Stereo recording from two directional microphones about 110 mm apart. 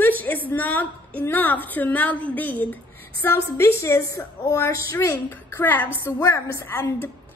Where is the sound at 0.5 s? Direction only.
15° left (ahead or behind).